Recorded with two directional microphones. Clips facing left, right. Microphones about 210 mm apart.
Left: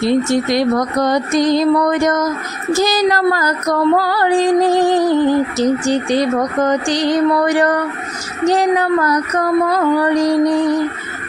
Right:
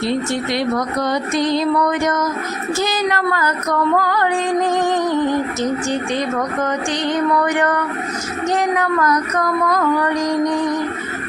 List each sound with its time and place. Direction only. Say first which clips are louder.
0.0 s female singing: left 5 dB; 40° left (ahead or behind)